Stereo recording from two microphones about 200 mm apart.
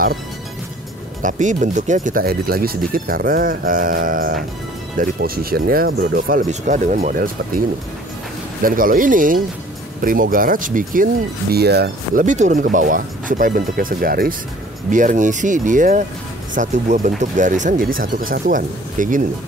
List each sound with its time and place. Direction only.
1.2 s speech: 40° right (ahead or behind)
8.6 s speech: 45° right (ahead or behind)
11.5 s speech: 55° right (ahead or behind)
12.3 s speech: 40° right (ahead or behind)